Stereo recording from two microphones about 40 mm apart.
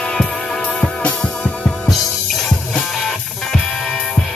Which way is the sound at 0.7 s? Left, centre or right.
Left.